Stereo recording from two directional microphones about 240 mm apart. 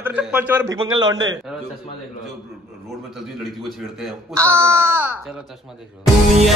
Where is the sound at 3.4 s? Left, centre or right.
Centre.